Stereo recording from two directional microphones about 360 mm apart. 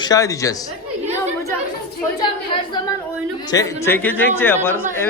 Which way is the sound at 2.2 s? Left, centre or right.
Centre.